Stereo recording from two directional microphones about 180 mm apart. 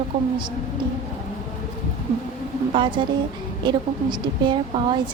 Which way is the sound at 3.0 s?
25° right (ahead or behind).